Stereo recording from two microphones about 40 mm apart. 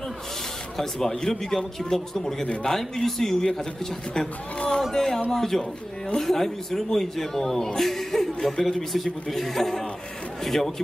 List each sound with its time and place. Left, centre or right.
0.7 s a man's voice: centre